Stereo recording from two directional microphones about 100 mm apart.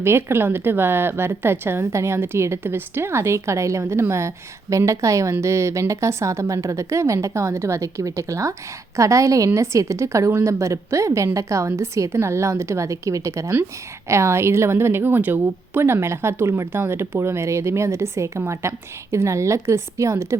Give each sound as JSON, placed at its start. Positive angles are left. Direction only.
{"t": 0.0, "sound": "a woman's voice", "side_deg": -25}